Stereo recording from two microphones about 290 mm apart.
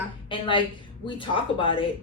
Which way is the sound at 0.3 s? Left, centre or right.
Centre.